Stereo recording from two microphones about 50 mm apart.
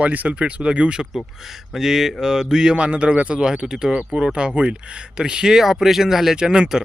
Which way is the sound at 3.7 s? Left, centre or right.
Centre.